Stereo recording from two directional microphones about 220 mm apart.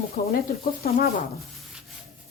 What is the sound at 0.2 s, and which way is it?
Speech, 40° left (ahead or behind).